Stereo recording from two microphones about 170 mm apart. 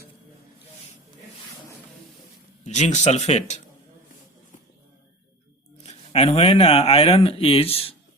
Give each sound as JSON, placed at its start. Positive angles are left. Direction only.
{"t": 2.6, "sound": "speech", "side_deg": 40}
{"t": 5.8, "sound": "speech", "side_deg": 40}